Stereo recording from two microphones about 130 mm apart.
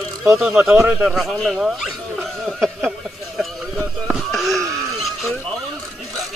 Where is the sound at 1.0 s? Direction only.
5° right (ahead or behind).